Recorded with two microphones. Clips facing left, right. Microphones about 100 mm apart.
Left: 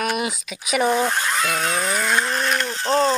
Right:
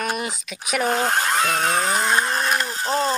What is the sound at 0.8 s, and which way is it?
Speech, 55° right (ahead or behind).